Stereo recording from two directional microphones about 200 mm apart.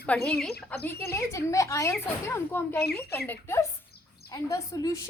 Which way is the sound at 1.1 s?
15° left (ahead or behind).